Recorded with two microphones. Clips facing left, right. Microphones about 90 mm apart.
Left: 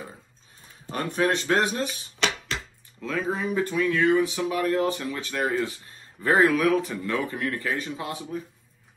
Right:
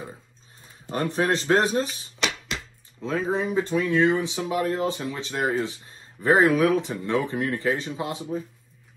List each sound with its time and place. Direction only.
0.9 s speech: 30° right (ahead or behind)
3.0 s speech: 30° right (ahead or behind)